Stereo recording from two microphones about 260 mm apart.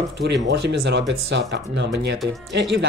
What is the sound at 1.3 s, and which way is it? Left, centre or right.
Speech, right.